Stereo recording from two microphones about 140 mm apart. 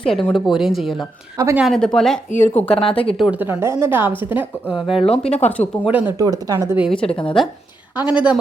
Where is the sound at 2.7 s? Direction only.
40° left (ahead or behind).